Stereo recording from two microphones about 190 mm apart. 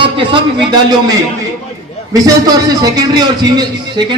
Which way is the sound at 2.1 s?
20° right (ahead or behind).